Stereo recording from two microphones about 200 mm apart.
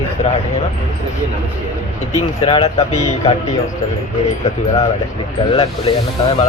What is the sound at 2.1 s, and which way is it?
Speech, 30° left (ahead or behind).